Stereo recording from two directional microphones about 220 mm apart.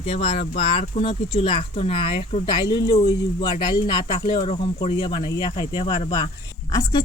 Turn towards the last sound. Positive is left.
turn(degrees=15)  # may be behind; listen again after turning